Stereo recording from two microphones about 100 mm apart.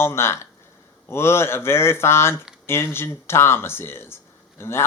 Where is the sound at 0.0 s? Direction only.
25° left (ahead or behind).